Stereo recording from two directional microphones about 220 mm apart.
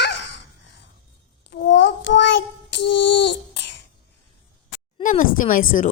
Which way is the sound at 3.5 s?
50° left (ahead or behind).